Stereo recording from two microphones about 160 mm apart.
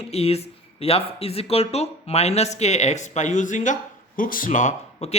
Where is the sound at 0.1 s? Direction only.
40° left (ahead or behind).